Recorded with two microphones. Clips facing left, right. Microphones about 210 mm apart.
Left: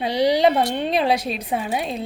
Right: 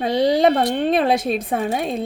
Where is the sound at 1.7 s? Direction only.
Centre (ahead or behind).